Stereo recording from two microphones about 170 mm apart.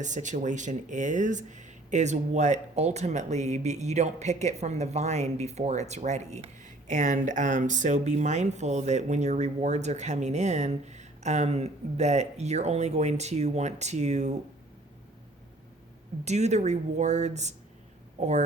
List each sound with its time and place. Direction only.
0.0 s speech: 45° right (ahead or behind)
16.2 s speech: 40° right (ahead or behind)